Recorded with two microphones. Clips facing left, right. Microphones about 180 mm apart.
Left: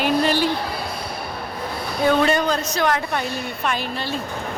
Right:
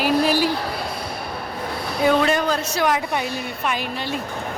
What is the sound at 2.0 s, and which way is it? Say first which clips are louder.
Speech: even; centre (ahead or behind).